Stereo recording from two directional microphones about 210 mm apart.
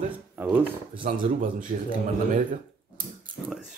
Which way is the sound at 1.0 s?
40° right (ahead or behind).